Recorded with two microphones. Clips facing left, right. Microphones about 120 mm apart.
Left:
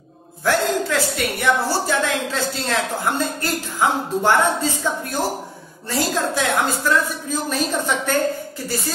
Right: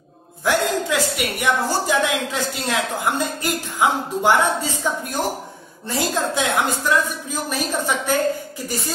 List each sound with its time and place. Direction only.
0.5 s a woman's voice: 15° right (ahead or behind)